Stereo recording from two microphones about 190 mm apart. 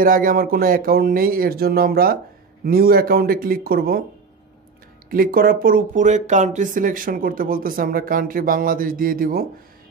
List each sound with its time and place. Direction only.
0.0 s speech: 45° right (ahead or behind)
5.1 s speech: 50° right (ahead or behind)